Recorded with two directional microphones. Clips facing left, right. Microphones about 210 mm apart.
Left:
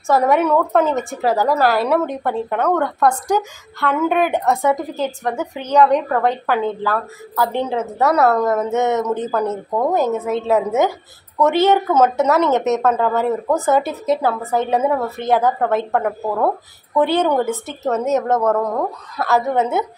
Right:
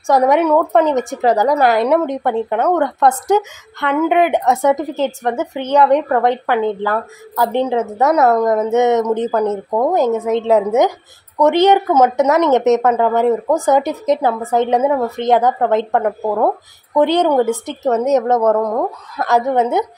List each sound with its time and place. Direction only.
0.0 s a woman's voice: 15° right (ahead or behind)
6.4 s a woman's voice: 15° right (ahead or behind)